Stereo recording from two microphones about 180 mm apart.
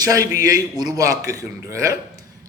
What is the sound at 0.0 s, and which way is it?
A man's voice, 20° right (ahead or behind).